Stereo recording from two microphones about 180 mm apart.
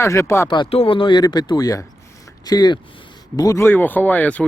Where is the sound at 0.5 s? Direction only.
30° left (ahead or behind).